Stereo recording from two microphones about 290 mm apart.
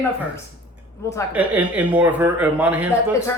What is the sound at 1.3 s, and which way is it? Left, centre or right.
Speech, centre.